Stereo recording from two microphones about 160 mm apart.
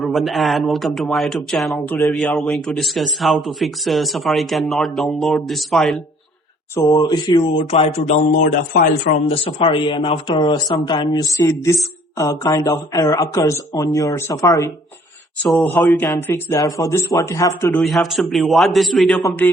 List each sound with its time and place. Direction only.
0.0 s speech: centre (ahead or behind)
6.7 s speech: 20° left (ahead or behind)
7.6 s a man's voice: 40° left (ahead or behind)
9.3 s speech: 35° left (ahead or behind); by 14.7 s 20° left (ahead or behind)
15.4 s speech: centre (ahead or behind)
15.7 s speech: 20° left (ahead or behind)
17.7 s speech: centre (ahead or behind)